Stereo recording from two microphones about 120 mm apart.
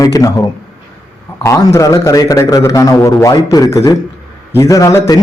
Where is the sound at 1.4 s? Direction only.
25° left (ahead or behind).